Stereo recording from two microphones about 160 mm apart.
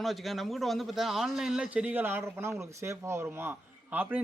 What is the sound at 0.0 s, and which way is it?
A man's voice, centre (ahead or behind).